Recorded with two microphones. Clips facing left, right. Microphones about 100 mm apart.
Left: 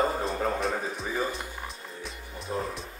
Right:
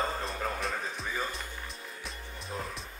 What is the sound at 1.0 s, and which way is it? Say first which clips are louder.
Speech: left 5 dB; centre (ahead or behind).